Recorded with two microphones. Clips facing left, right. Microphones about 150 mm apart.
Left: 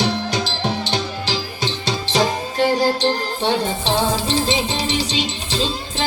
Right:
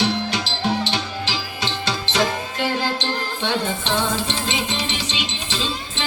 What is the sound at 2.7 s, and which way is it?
Music, 35° left (ahead or behind).